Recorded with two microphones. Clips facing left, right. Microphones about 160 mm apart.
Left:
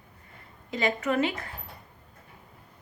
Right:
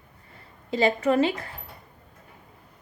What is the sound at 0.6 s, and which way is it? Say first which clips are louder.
Speech: right 5 dB; 30° right (ahead or behind).